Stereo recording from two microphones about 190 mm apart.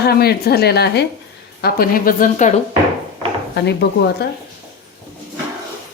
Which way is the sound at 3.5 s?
60° left (ahead or behind).